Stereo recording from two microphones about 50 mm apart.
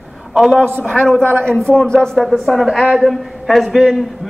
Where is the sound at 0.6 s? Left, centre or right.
Centre.